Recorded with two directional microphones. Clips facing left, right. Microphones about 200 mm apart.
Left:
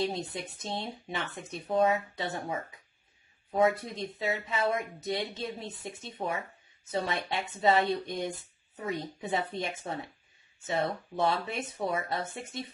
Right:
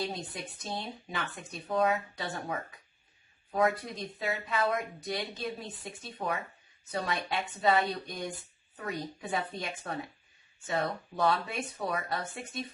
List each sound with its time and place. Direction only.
0.0 s speech: 25° left (ahead or behind)